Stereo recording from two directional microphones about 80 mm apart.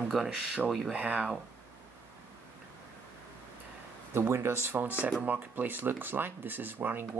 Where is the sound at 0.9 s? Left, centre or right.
Centre.